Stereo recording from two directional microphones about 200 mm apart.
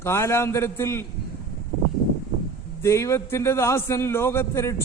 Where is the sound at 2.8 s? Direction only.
15° left (ahead or behind).